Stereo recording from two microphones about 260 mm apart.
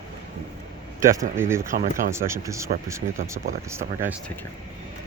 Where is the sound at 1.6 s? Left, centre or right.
Right.